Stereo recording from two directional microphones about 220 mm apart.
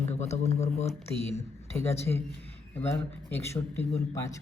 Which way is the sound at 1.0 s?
10° left (ahead or behind).